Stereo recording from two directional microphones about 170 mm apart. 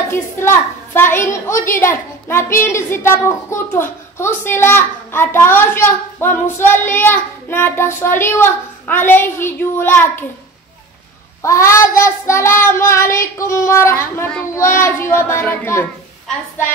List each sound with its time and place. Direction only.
0.1 s a child's voice: 15° left (ahead or behind)
11.4 s a child's voice: 15° left (ahead or behind)